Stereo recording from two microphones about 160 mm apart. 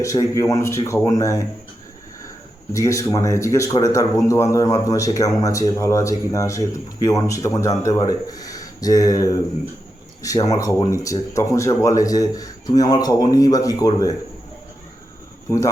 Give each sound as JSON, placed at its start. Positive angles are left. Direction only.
{"t": 0.0, "sound": "speech", "side_deg": 20}
{"t": 2.7, "sound": "speech", "side_deg": 20}
{"t": 10.5, "sound": "speech", "side_deg": 20}
{"t": 15.4, "sound": "speech", "side_deg": 20}